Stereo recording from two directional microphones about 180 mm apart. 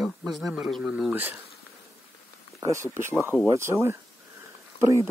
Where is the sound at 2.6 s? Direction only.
15° right (ahead or behind).